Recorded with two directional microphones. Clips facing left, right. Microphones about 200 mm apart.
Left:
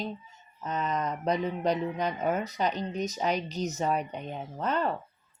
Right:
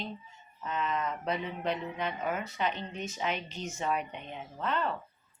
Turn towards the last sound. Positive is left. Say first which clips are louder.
# left 3 dB
turn(degrees=40)  # may be behind; listen again after turning